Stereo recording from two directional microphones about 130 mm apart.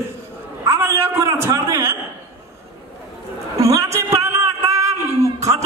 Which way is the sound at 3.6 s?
25° right (ahead or behind).